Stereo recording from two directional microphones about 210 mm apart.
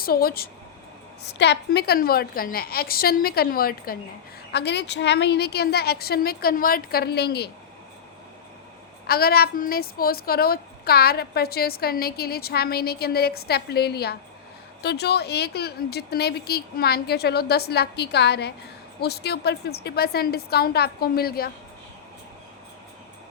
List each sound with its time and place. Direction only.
0.0 s a woman's voice: 45° left (ahead or behind)
9.0 s a woman's voice: 45° left (ahead or behind)